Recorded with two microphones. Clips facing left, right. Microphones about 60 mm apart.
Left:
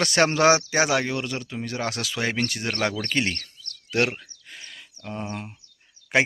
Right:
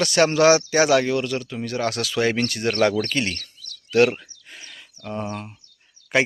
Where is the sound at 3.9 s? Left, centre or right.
Centre.